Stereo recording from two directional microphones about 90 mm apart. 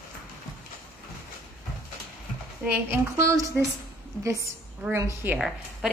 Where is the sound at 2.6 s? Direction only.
25° right (ahead or behind).